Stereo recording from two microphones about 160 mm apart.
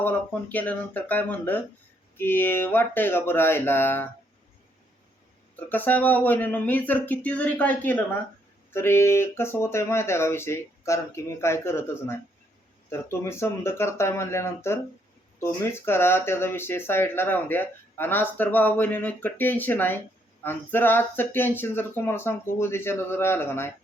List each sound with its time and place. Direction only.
0.0 s speech: 10° left (ahead or behind)
5.5 s speech: 10° left (ahead or behind)